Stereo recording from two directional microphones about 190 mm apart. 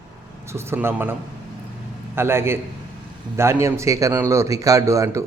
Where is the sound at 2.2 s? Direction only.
10° right (ahead or behind).